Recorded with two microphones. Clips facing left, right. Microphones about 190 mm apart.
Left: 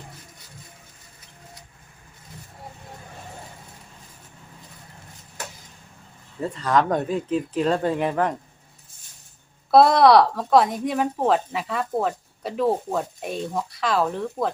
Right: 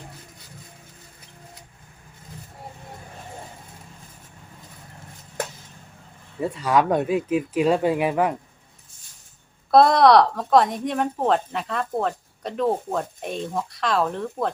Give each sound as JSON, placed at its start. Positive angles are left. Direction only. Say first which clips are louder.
{"t": 6.4, "sound": "speech", "louder": "right 1 dB", "side_deg": -10}
{"t": 9.7, "sound": "speech", "louder": "even", "side_deg": 0}